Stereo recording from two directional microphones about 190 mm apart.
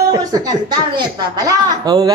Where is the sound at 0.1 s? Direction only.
20° right (ahead or behind).